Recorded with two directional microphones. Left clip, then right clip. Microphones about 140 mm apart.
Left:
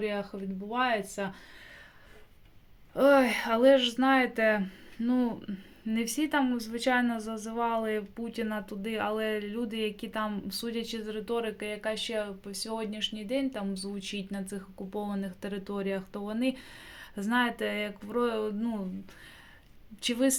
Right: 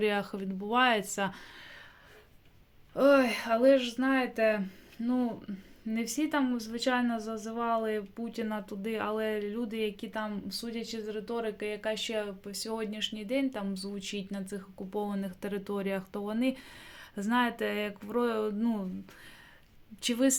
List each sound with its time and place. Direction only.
0.0 s speech: 45° right (ahead or behind)
2.9 s speech: 10° left (ahead or behind)
10.5 s speech: 20° left (ahead or behind); by 18.9 s 10° right (ahead or behind)
20.0 s speech: 5° right (ahead or behind)